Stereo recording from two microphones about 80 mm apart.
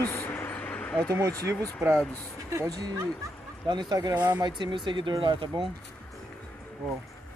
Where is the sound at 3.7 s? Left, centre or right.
Right.